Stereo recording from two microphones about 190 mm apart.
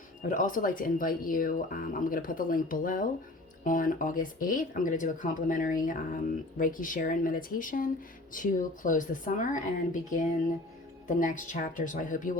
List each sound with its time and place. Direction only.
0.2 s speech: 45° left (ahead or behind)